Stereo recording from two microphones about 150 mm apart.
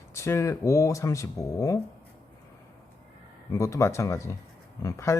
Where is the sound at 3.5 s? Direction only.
20° left (ahead or behind).